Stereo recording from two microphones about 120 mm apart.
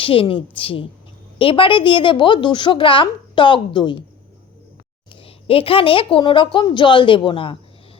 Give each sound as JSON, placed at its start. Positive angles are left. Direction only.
{"t": 0.0, "sound": "a woman's voice", "side_deg": 50}
{"t": 5.2, "sound": "a woman's voice", "side_deg": 50}